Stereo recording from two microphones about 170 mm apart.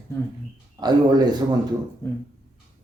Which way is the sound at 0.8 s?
25° right (ahead or behind).